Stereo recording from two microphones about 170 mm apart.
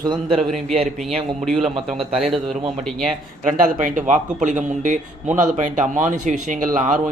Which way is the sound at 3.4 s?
50° right (ahead or behind).